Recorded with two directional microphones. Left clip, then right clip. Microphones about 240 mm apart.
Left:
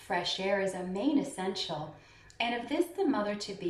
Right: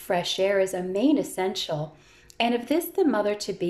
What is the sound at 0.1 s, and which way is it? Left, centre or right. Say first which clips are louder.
Speech: right 7 dB; right.